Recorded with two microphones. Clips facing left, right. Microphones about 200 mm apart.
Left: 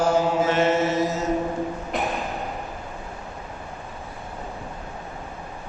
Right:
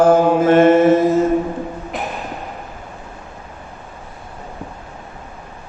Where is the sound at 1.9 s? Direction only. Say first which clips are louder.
Even; centre (ahead or behind).